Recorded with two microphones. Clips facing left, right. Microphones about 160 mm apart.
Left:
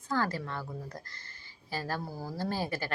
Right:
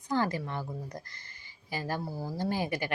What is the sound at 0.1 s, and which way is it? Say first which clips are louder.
Speech: right 2 dB; 15° right (ahead or behind).